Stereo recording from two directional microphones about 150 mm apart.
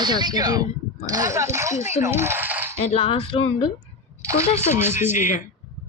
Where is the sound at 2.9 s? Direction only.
40° left (ahead or behind).